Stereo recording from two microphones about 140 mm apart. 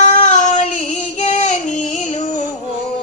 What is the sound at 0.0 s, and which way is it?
Music, 60° left (ahead or behind).